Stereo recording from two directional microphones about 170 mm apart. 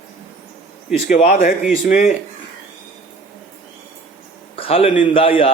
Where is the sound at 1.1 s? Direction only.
50° left (ahead or behind).